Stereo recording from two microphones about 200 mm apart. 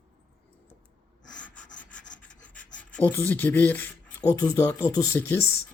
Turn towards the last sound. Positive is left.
turn(degrees=10)  # may be behind; listen again after turning